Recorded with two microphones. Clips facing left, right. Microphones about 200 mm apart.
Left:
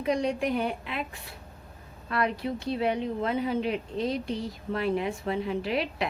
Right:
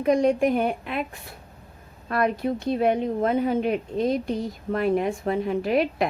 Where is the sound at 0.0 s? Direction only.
50° right (ahead or behind).